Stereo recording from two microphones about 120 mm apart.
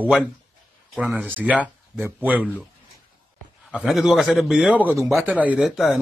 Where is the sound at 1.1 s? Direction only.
15° right (ahead or behind).